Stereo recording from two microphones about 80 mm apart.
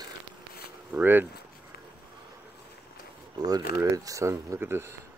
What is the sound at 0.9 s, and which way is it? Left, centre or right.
Speech, right.